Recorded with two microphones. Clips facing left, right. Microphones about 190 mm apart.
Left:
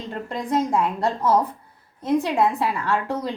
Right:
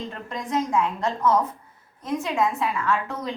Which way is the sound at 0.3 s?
35° left (ahead or behind).